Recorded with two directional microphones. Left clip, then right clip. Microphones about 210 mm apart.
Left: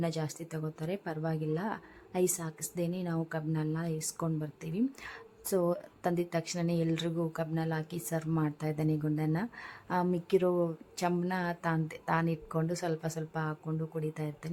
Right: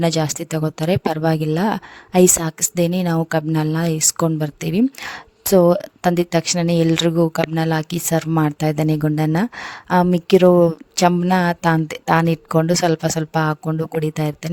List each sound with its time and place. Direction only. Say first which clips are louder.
0.0 s speech: right 16 dB; 50° right (ahead or behind)